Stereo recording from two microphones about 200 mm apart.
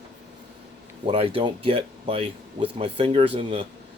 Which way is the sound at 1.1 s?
30° right (ahead or behind).